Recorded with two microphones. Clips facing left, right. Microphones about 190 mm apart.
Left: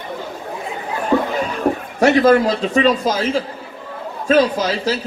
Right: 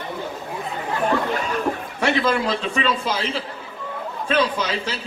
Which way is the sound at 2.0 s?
40° left (ahead or behind).